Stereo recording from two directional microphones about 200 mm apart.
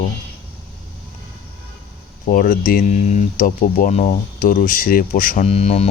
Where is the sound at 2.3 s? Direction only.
45° left (ahead or behind).